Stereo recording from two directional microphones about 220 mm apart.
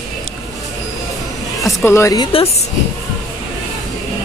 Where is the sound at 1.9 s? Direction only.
15° left (ahead or behind).